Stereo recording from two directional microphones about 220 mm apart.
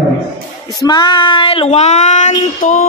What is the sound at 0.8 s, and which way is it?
Speech, 20° left (ahead or behind).